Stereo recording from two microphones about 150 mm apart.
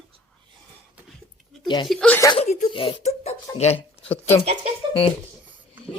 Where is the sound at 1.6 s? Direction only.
30° left (ahead or behind).